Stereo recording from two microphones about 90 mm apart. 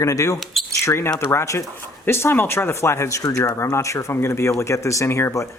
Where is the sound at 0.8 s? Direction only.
30° left (ahead or behind).